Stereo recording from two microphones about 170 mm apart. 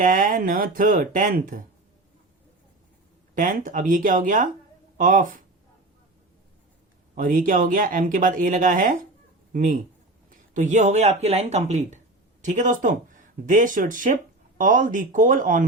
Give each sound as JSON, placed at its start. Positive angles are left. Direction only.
{"t": 0.0, "sound": "speech", "side_deg": -50}
{"t": 3.3, "sound": "speech", "side_deg": -50}
{"t": 7.2, "sound": "speech", "side_deg": -55}